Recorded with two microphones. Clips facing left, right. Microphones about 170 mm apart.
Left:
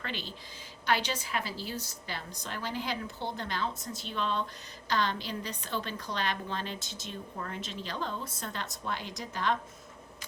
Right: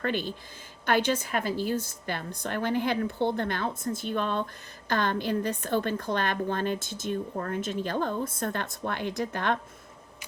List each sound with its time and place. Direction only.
0.0 s a woman's voice: 50° right (ahead or behind)